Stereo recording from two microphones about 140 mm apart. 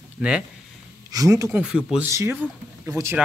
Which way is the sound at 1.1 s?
25° right (ahead or behind).